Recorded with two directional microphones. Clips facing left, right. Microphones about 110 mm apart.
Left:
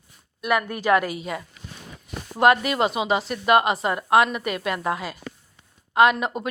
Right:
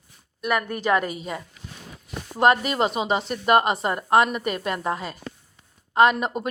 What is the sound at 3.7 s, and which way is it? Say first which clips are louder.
Speech: left 1 dB; centre (ahead or behind).